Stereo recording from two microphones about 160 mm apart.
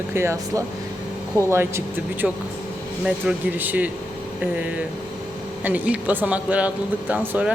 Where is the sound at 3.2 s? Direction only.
10° right (ahead or behind).